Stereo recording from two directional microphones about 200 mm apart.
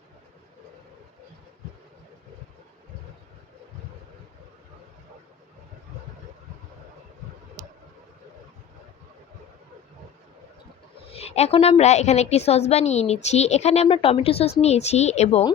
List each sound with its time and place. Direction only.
11.1 s a woman's voice: 30° left (ahead or behind)